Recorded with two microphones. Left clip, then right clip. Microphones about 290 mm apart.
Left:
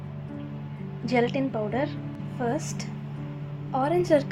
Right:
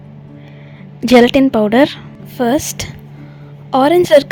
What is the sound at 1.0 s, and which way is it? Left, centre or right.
A woman's voice, right.